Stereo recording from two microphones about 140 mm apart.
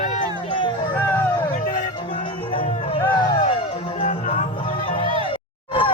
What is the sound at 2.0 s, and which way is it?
Music, 35° left (ahead or behind).